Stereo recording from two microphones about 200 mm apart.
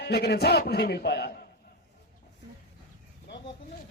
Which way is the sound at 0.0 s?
55° left (ahead or behind).